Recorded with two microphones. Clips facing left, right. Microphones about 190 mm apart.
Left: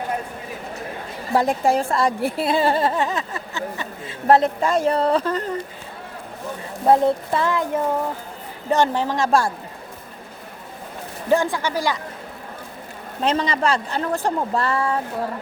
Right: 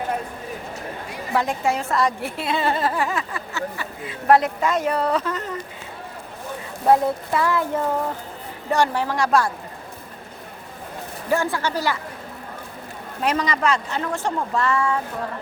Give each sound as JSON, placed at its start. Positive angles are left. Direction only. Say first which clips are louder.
{"t": 1.3, "sound": "a woman's voice", "louder": "left 4 dB", "side_deg": 35}
{"t": 6.8, "sound": "speech", "louder": "left 2 dB", "side_deg": 25}
{"t": 8.7, "sound": "speech", "louder": "left 2 dB", "side_deg": 20}
{"t": 11.3, "sound": "speech", "louder": "left 3 dB", "side_deg": 15}
{"t": 13.2, "sound": "a woman's voice", "louder": "left 1 dB", "side_deg": 30}